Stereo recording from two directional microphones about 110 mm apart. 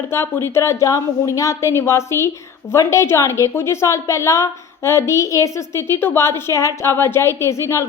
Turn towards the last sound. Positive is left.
turn(degrees=25)  # may be behind; listen again after turning